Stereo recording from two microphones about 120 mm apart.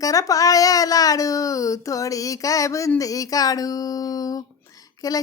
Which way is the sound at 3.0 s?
30° left (ahead or behind).